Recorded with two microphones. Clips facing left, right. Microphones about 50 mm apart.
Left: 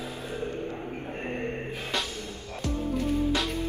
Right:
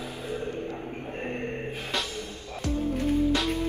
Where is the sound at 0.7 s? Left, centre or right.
Centre.